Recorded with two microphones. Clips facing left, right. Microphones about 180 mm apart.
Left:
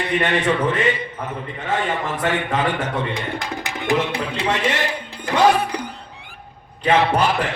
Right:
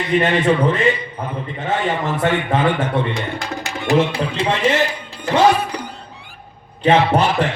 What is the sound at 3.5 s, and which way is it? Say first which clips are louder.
Tabla: right 2 dB; 15° left (ahead or behind).